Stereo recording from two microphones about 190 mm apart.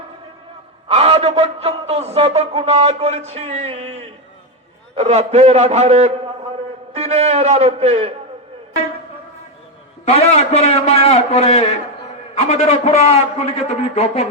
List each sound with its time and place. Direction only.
0.9 s a man's voice: 30° right (ahead or behind)
10.1 s a man's voice: 35° left (ahead or behind)